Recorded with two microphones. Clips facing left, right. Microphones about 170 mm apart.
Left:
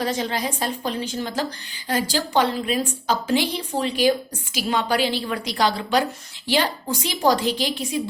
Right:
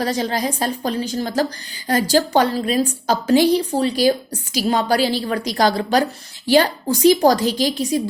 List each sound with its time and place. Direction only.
0.0 s a woman's voice: 40° right (ahead or behind)